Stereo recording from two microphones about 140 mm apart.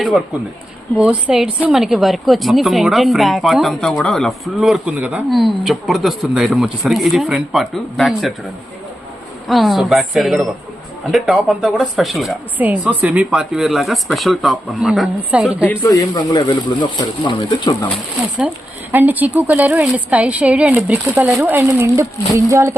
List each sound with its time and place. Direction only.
0.9 s a woman's voice: 5° right (ahead or behind)
9.5 s a woman's voice: centre (ahead or behind)
12.5 s a woman's voice: 10° right (ahead or behind)
15.6 s speech: 15° left (ahead or behind)
15.9 s speech: 25° left (ahead or behind)
18.3 s speech: 10° right (ahead or behind)